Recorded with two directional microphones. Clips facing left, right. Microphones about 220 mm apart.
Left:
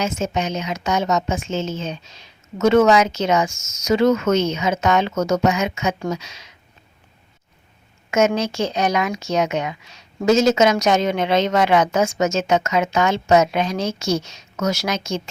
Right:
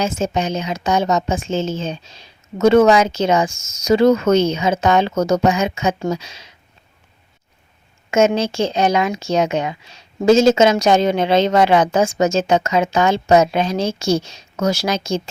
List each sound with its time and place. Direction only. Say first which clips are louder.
0.0 s speech: right 3 dB; 30° right (ahead or behind)
8.1 s speech: right 3 dB; 30° right (ahead or behind)